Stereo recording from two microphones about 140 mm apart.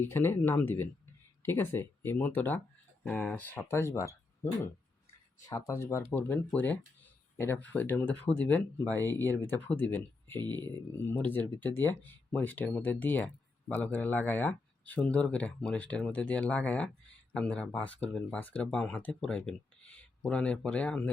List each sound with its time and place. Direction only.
0.0 s speech: 15° left (ahead or behind)
5.5 s speech: 25° left (ahead or behind); by 21.1 s 10° left (ahead or behind)